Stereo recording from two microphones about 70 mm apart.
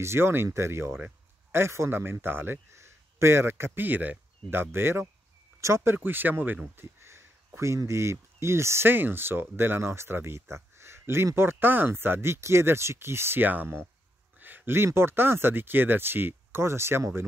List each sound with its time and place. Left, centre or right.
0.0 s a man's voice: right
5.9 s a man's voice: right
14.4 s a sound: right
15.0 s a man's voice: right